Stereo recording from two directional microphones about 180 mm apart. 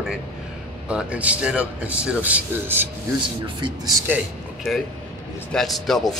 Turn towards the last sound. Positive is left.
turn(degrees=0)  # may be behind; listen again after turning